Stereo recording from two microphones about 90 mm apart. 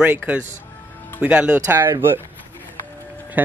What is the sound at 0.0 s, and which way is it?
Speech, 20° right (ahead or behind).